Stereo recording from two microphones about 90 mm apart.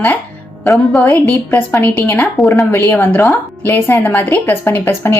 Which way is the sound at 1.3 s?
25° left (ahead or behind).